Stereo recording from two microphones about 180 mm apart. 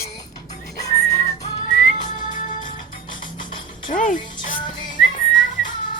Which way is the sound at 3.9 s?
45° left (ahead or behind).